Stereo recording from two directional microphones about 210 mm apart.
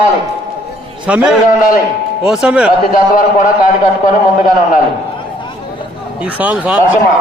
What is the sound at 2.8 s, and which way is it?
A man's voice, 40° left (ahead or behind).